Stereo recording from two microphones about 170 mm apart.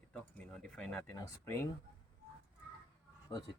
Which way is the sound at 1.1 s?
20° left (ahead or behind).